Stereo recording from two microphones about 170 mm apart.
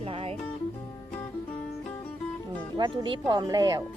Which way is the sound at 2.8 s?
25° right (ahead or behind).